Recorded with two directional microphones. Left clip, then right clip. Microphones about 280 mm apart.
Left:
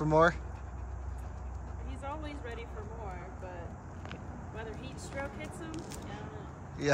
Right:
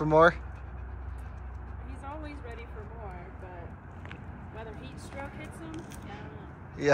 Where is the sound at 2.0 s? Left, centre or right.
Centre.